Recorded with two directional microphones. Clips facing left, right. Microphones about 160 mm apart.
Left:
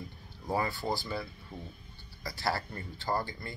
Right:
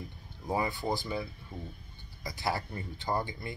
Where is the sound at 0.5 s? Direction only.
20° right (ahead or behind).